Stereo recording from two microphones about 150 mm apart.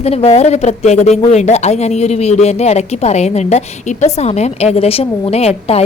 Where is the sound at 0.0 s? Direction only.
45° left (ahead or behind).